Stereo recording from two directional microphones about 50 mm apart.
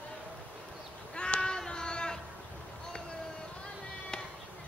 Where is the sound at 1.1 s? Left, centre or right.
Centre.